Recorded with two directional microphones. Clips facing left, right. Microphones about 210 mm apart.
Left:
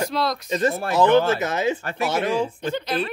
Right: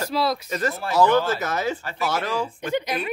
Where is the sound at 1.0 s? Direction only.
25° left (ahead or behind).